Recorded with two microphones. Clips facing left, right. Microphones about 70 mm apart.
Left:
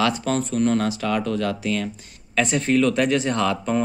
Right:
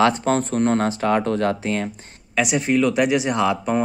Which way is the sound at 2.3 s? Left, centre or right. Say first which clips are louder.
Even; centre.